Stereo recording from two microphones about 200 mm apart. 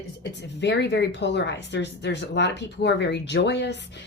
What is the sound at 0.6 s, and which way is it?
A woman's voice, 60° left (ahead or behind).